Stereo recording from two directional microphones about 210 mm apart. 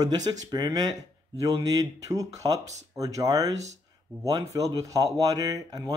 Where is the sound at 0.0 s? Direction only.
20° right (ahead or behind).